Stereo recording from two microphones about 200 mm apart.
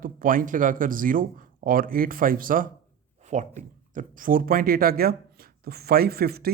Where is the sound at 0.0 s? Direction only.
45° right (ahead or behind).